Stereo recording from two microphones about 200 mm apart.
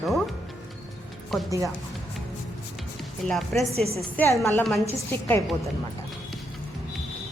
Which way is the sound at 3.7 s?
30° right (ahead or behind).